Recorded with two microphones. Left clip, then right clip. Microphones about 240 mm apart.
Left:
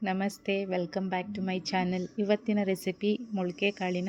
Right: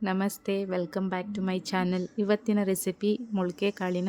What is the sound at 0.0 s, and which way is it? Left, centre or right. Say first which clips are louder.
A woman's voice: right 1 dB; right.